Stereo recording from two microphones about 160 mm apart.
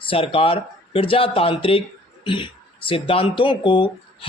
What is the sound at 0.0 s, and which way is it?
Speech, 35° left (ahead or behind).